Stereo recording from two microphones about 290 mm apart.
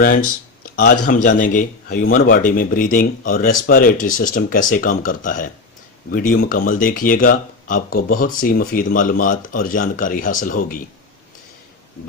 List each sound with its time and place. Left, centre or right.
1.0 s speech: left